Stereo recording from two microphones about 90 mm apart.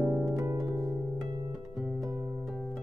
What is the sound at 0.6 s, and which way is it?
Harp, centre (ahead or behind).